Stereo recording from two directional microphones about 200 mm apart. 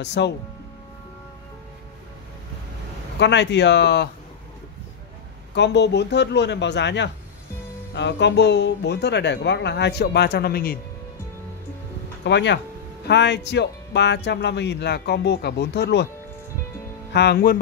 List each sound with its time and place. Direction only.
0.0 s speech: 60° left (ahead or behind)
3.2 s speech: 60° left (ahead or behind)
5.5 s speech: 60° left (ahead or behind)
12.3 s speech: 60° left (ahead or behind)
17.1 s speech: 55° left (ahead or behind)